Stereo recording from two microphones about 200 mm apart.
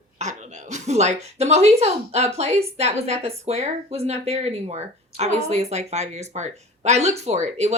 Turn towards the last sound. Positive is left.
turn(degrees=-35)  # may be behind; listen again after turning